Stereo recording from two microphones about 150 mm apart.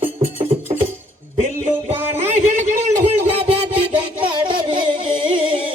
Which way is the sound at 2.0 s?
15° right (ahead or behind).